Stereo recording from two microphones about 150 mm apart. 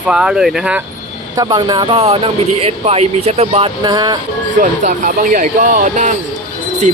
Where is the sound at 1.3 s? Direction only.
30° right (ahead or behind).